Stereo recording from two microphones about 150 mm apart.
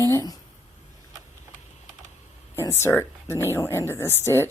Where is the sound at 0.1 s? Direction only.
20° left (ahead or behind).